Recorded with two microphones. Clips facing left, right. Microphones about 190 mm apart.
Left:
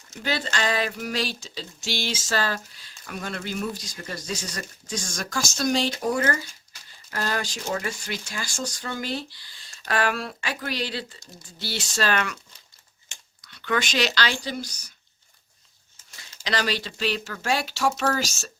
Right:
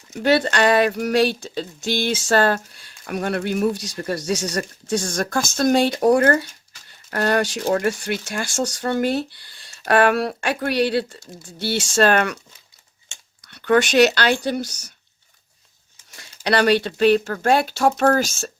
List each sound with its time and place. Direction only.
0.1 s speech: 60° right (ahead or behind)
13.5 s speech: 50° right (ahead or behind)
16.4 s speech: 60° right (ahead or behind)